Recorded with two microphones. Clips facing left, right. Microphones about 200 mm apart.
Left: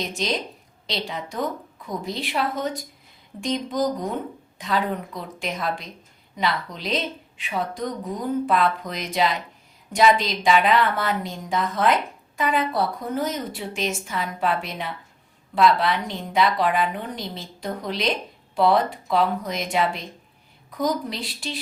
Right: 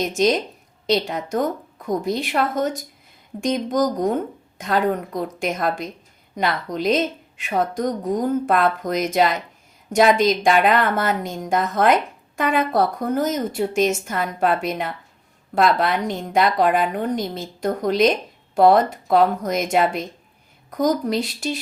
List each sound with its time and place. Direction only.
0.0 s a woman's voice: 45° right (ahead or behind)